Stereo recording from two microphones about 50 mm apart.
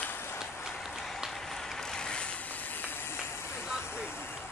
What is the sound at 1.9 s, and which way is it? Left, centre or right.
Vehicle, centre.